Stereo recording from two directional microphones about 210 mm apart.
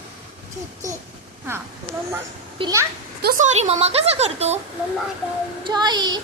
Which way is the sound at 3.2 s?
35° right (ahead or behind).